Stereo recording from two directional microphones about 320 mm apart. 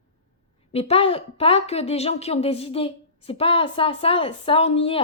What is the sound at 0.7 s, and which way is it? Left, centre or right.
A woman's voice, centre.